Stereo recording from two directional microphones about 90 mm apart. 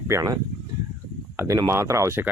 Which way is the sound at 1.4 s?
35° right (ahead or behind).